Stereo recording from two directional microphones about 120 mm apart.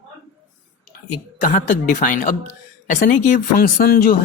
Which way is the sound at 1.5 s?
90° left.